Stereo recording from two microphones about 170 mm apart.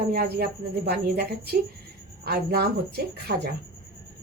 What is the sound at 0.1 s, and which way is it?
A woman's voice, 65° right (ahead or behind).